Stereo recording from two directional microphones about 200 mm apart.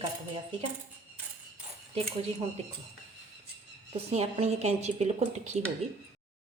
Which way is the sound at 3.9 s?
30° right (ahead or behind).